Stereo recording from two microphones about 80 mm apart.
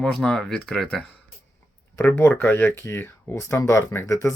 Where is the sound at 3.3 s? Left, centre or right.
Left.